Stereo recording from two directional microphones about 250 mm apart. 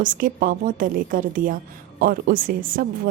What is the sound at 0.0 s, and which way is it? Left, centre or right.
A woman's voice, right.